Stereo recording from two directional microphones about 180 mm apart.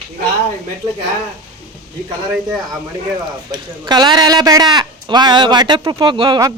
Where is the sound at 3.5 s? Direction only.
25° right (ahead or behind).